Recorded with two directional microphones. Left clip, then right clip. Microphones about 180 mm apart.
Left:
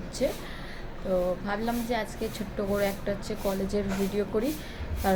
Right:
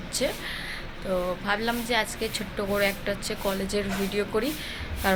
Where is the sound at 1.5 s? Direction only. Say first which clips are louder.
Right 4 dB; 10° left (ahead or behind).